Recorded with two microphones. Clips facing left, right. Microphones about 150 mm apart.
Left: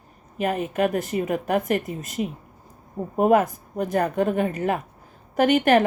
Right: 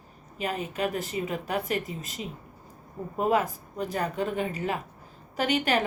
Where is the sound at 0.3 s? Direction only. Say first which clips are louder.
Left 7 dB; 50° left (ahead or behind).